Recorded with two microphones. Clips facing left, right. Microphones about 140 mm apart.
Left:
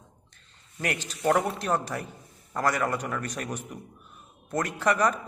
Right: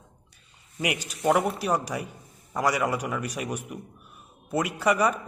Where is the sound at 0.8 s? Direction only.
10° right (ahead or behind).